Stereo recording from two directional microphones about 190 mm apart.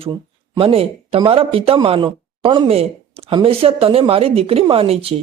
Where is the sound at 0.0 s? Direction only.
25° right (ahead or behind).